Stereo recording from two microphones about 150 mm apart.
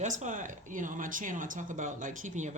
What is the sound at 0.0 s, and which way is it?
Speech, 55° right (ahead or behind).